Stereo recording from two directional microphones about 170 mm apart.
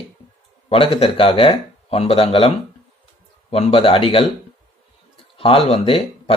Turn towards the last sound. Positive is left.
turn(degrees=35)  # may be behind; listen again after turning